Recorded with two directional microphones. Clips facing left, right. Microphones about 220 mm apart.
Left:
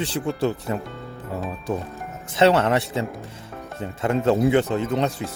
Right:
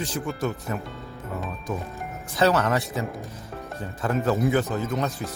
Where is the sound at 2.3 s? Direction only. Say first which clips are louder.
Left 4 dB; 25° left (ahead or behind).